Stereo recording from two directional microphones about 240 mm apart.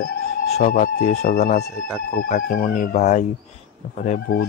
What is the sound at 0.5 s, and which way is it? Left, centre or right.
Speech, left.